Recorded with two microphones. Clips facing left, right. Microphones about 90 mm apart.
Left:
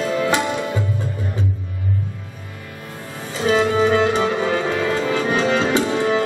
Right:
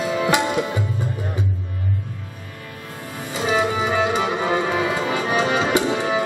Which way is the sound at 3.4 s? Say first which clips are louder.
Left 5 dB; 10° right (ahead or behind).